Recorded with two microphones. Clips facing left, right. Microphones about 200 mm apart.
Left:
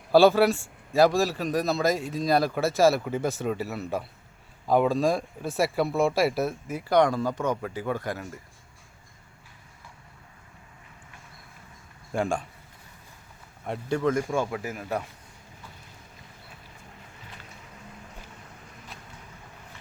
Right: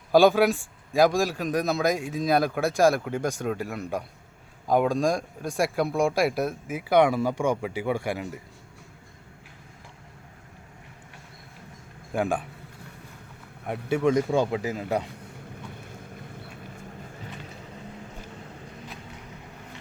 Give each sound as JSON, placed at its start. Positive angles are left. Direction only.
{"t": 0.1, "sound": "speech", "side_deg": -15}
{"t": 1.3, "sound": "speech", "side_deg": 0}
{"t": 12.1, "sound": "speech", "side_deg": -5}
{"t": 13.9, "sound": "speech", "side_deg": -15}